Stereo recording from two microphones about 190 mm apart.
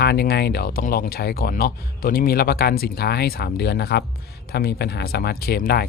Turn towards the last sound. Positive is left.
turn(degrees=55)  # may be behind; listen again after turning